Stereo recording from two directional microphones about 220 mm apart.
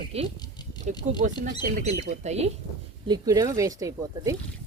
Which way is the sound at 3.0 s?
15° right (ahead or behind).